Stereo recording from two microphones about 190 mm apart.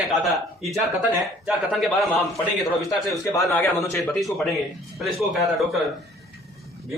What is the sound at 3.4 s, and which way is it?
Speech, centre (ahead or behind).